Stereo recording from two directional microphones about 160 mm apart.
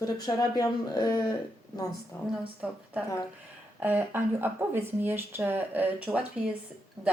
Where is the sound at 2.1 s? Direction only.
15° left (ahead or behind).